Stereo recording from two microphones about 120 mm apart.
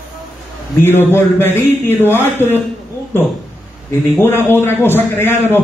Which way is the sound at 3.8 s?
20° left (ahead or behind).